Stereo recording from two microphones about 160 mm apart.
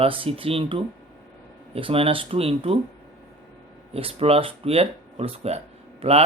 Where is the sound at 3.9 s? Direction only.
35° right (ahead or behind).